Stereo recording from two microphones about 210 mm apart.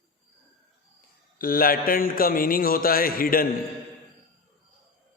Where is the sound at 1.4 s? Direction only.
45° left (ahead or behind).